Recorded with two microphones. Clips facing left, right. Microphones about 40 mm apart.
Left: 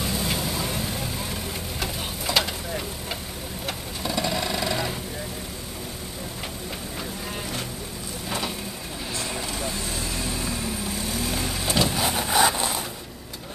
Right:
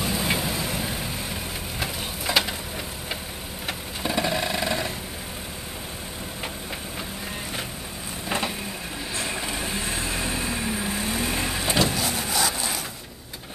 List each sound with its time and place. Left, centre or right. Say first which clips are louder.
0.0 s vehicle: right 2 dB; centre
3.6 s vehicle: right 2 dB; centre
9.1 s vehicle: right 1 dB; centre
12.0 s wood: left 2 dB; centre
12.3 s a sound: left 8 dB; left